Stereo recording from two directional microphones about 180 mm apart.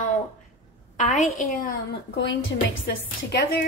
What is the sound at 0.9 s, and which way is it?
Speech, 40° left (ahead or behind).